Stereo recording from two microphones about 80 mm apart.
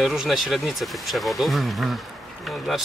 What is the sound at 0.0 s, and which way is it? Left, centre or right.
Speech, centre.